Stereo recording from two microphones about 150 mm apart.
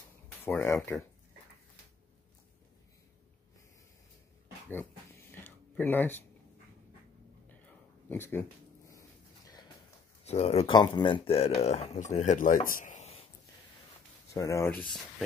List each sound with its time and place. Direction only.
0.5 s speech: 15° left (ahead or behind)
4.6 s a sound: 15° left (ahead or behind)
8.1 s a sound: 15° left (ahead or behind)
10.2 s speech: 45° left (ahead or behind)
10.7 s speech: 30° left (ahead or behind); by 13.2 s 50° left (ahead or behind)
14.3 s speech: 20° left (ahead or behind)